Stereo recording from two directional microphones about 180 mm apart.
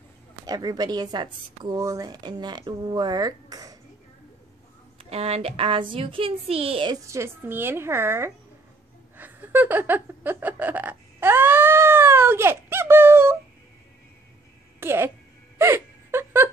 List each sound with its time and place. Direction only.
0.5 s a woman's voice: 20° right (ahead or behind)
4.9 s a woman's voice: 35° right (ahead or behind); by 8.3 s 15° right (ahead or behind)
9.1 s a sound: 10° right (ahead or behind)
14.8 s speech: 15° right (ahead or behind)
15.5 s wail: 15° right (ahead or behind)